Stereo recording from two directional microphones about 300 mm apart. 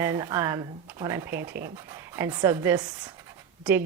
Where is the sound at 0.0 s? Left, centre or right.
Centre.